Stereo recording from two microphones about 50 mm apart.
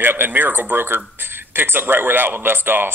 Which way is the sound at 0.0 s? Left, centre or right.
Right.